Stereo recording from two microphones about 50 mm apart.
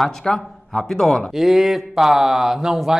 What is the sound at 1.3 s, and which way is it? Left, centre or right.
Speech, centre.